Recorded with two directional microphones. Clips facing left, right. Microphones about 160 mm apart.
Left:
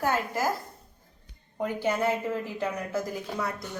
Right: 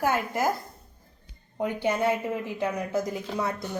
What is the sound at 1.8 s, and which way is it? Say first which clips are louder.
A woman's voice: right 1 dB; 15° right (ahead or behind).